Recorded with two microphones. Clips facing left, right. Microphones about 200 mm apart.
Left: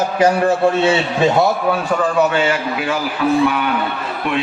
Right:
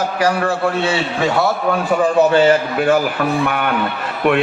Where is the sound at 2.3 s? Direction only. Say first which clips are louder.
Right 5 dB; 40° right (ahead or behind); by 3.7 s 55° right (ahead or behind).